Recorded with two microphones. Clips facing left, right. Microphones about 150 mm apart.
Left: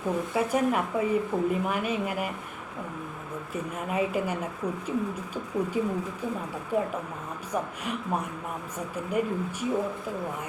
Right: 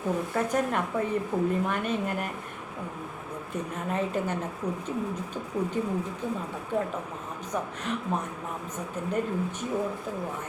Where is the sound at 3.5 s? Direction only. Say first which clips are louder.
Even; 10° left (ahead or behind).